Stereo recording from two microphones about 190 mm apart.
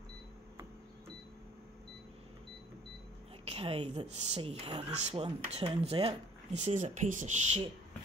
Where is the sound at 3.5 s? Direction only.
30° right (ahead or behind).